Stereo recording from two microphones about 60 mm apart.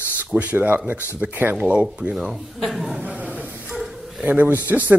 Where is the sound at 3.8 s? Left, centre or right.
Centre.